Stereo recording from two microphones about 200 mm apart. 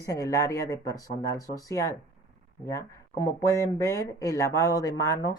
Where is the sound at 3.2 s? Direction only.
15° left (ahead or behind).